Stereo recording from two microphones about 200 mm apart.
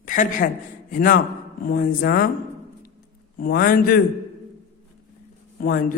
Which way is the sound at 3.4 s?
45° left (ahead or behind).